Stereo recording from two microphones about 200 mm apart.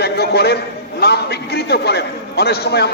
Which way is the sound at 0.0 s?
55° left (ahead or behind).